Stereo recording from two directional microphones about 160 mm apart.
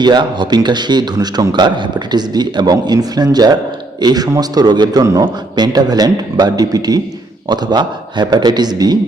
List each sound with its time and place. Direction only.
0.0 s a man's voice: 30° right (ahead or behind)